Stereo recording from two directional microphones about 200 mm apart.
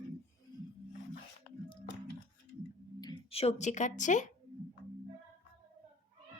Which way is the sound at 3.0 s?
25° left (ahead or behind).